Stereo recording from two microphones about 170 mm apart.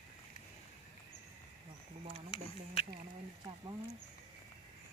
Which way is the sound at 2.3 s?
35° left (ahead or behind).